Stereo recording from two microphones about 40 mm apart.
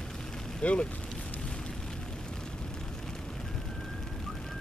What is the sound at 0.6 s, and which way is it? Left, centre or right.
Speech, left.